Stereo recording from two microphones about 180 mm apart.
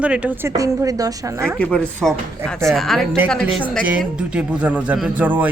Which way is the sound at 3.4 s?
10° right (ahead or behind).